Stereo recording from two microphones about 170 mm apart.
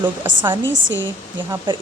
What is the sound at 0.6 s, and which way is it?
Speech, 90° right.